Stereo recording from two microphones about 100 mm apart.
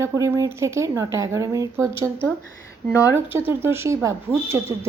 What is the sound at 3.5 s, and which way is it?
Speech, 25° right (ahead or behind).